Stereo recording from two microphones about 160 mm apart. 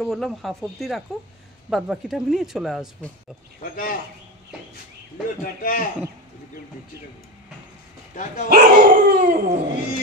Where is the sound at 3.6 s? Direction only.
60° left (ahead or behind).